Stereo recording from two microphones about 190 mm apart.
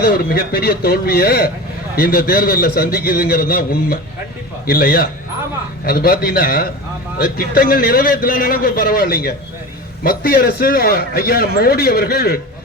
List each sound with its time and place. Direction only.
0.0 s a man's voice: 50° left (ahead or behind)